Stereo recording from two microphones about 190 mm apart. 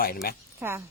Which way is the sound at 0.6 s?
10° right (ahead or behind).